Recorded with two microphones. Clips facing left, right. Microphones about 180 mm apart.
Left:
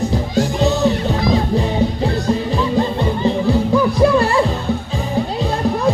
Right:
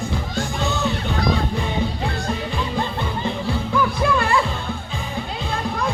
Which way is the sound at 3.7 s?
35° left (ahead or behind).